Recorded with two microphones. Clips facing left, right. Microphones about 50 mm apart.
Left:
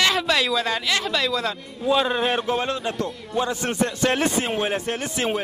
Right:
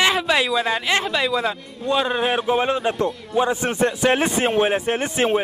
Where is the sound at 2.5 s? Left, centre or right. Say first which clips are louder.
Right 5 dB; right.